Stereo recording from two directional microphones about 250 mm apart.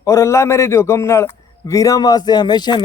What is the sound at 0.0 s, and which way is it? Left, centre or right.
A man's voice, centre.